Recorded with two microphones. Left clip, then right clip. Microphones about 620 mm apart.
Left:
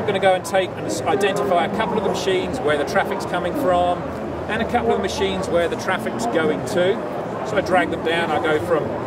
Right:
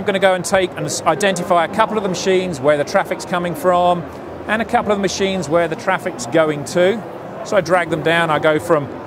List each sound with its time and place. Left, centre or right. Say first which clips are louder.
0.0 s speech: right 2 dB; right